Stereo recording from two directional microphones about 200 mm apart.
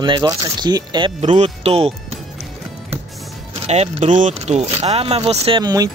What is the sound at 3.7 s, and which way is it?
Speech, 35° right (ahead or behind).